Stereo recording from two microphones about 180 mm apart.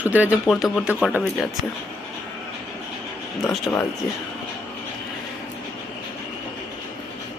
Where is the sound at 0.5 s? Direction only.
5° left (ahead or behind).